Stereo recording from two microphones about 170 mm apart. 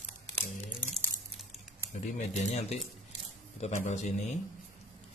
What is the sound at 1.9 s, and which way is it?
Speech, 40° left (ahead or behind).